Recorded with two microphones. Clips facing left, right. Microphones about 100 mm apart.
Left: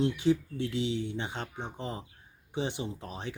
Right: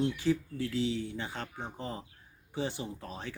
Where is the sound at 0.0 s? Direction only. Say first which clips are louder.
Left 3 dB; 20° left (ahead or behind).